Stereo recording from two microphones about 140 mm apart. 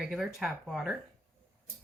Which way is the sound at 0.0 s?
5° right (ahead or behind).